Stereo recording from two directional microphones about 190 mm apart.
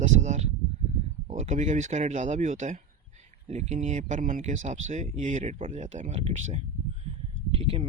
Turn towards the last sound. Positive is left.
turn(degrees=-30)  # may be behind; listen again after turning